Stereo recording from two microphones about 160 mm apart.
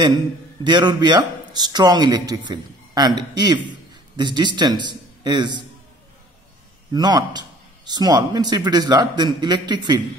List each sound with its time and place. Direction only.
0.7 s a man's voice: 25° right (ahead or behind)
6.9 s a man's voice: 25° right (ahead or behind)